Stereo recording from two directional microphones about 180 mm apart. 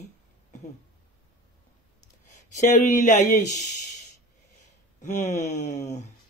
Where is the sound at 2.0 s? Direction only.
40° left (ahead or behind).